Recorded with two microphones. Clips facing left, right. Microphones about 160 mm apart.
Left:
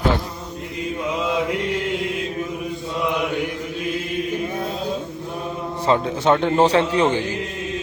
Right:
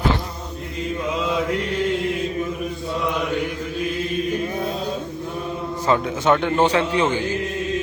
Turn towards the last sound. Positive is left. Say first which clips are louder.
# left 2 dB
turn(degrees=30)  # may be behind; listen again after turning